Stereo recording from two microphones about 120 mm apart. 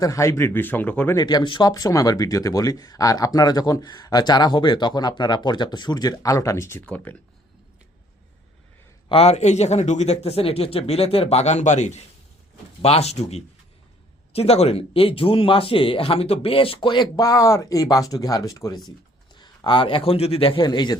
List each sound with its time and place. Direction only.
0.0 s speech: 25° left (ahead or behind)
1.1 s speech: 35° left (ahead or behind)
6.8 s speech: 15° left (ahead or behind)
9.0 s speech: 55° left (ahead or behind); by 12.0 s 75° left (ahead or behind)
12.8 s a man's voice: 60° left (ahead or behind)
20.7 s speech: 40° left (ahead or behind)